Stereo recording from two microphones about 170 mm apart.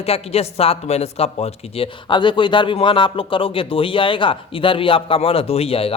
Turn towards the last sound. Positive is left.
turn(degrees=35)  # may be behind; listen again after turning